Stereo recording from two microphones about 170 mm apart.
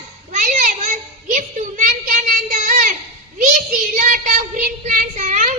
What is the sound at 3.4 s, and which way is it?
Child singing, 50° right (ahead or behind).